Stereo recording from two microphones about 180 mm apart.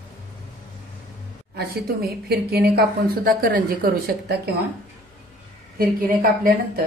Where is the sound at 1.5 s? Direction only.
60° right (ahead or behind).